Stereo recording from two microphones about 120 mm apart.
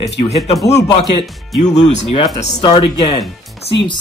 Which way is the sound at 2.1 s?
60° left (ahead or behind).